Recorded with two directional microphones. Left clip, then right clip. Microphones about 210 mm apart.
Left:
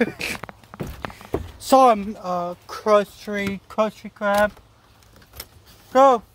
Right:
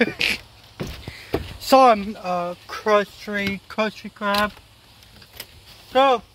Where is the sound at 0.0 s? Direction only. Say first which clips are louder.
Right 4 dB; 10° left (ahead or behind).